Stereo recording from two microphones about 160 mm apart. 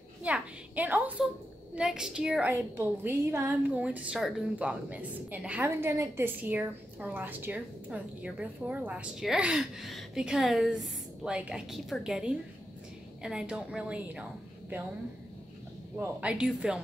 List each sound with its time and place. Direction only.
0.2 s a woman's voice: 10° right (ahead or behind)
16.0 s a woman's voice: 10° right (ahead or behind)